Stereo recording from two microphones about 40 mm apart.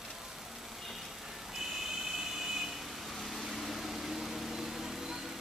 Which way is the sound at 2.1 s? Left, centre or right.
Centre.